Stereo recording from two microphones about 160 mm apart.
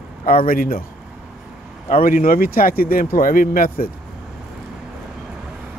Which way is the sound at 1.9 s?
55° left (ahead or behind).